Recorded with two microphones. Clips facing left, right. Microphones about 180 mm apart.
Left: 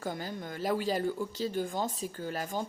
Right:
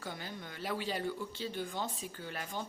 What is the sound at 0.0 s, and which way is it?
Speech, 45° left (ahead or behind).